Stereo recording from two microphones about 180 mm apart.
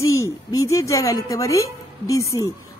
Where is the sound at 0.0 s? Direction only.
15° left (ahead or behind).